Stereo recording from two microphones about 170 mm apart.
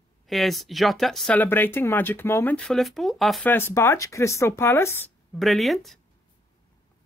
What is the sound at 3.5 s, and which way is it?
Speech, 15° left (ahead or behind).